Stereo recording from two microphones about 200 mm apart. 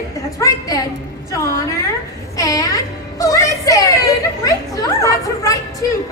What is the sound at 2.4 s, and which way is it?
A child's voice, 15° left (ahead or behind).